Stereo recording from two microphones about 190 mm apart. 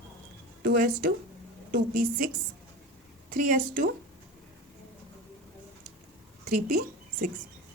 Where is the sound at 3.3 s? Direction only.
45° right (ahead or behind).